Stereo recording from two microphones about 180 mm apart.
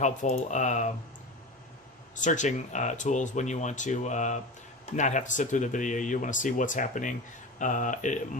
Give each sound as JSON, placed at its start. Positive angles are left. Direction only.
{"t": 0.0, "sound": "speech", "side_deg": 40}
{"t": 2.2, "sound": "speech", "side_deg": 45}